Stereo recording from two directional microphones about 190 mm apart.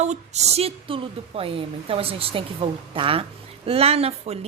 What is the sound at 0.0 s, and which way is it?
Speech, 35° right (ahead or behind).